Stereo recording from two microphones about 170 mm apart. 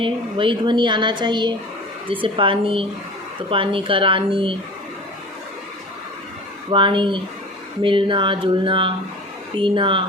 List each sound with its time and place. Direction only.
0.0 s a woman's voice: 30° right (ahead or behind)
6.7 s a woman's voice: 30° right (ahead or behind)